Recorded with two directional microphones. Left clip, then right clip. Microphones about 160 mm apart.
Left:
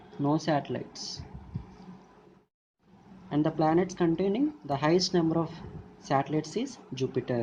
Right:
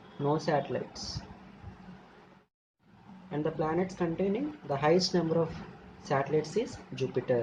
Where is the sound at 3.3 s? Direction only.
65° left (ahead or behind).